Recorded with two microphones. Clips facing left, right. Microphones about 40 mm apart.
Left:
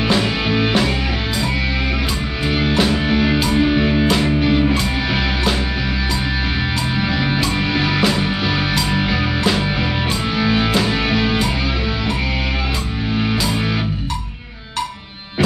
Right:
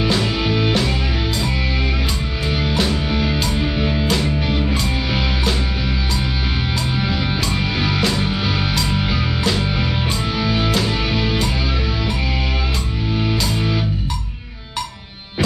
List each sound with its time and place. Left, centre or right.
0.0 s music: centre
2.4 s music: left
2.7 s music: centre
3.1 s music: centre
7.0 s music: centre